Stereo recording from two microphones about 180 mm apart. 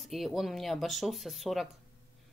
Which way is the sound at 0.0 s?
Centre (ahead or behind).